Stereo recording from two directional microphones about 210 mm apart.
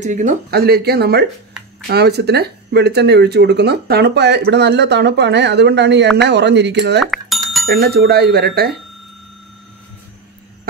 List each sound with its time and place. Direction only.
0.0 s speech: 35° right (ahead or behind); by 7.0 s 55° right (ahead or behind)
7.0 s music: centre (ahead or behind)
7.7 s speech: 45° right (ahead or behind)